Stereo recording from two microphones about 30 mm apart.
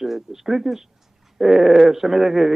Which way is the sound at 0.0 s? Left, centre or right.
Centre.